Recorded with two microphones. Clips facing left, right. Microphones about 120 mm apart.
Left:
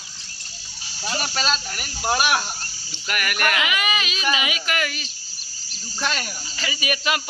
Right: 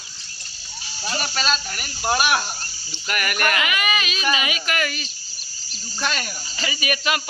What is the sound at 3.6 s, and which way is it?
A man's voice, 20° left (ahead or behind).